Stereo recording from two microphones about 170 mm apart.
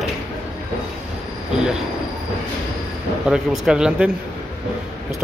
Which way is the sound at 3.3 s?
5° right (ahead or behind).